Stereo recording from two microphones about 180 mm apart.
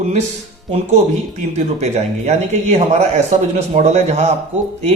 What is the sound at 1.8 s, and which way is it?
Speech, 40° right (ahead or behind).